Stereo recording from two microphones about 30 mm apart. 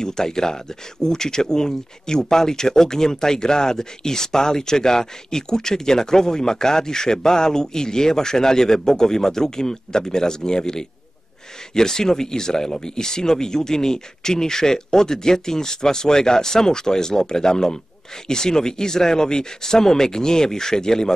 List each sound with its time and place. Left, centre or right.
0.0 s speech: left